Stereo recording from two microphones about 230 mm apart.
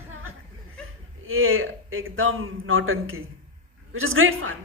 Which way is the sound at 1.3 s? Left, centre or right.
Right.